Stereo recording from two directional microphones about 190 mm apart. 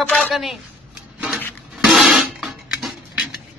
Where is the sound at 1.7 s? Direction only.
Centre (ahead or behind).